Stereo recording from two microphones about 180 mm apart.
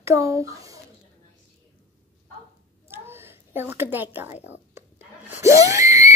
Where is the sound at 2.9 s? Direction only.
10° right (ahead or behind).